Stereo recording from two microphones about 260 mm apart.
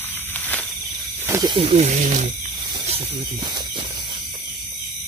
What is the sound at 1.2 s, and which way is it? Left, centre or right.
Speech, centre.